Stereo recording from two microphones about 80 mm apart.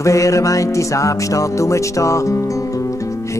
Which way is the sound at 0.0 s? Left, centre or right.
Left.